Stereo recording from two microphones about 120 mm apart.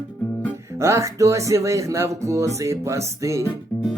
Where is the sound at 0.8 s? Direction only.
25° right (ahead or behind).